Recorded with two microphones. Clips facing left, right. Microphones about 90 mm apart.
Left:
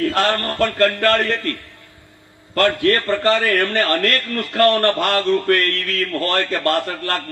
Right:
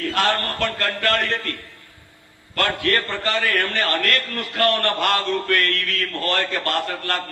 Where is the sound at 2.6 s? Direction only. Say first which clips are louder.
Left 5 dB; 35° left (ahead or behind).